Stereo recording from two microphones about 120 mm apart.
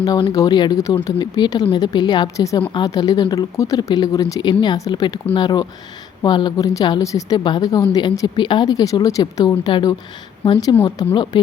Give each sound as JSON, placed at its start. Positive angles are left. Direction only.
{"t": 0.3, "sound": "speech", "side_deg": 35}